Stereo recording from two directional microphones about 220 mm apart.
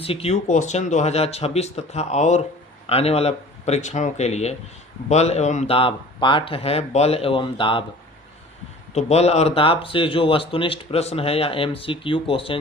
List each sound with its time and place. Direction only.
0.0 s speech: 25° left (ahead or behind)
8.9 s speech: 30° left (ahead or behind)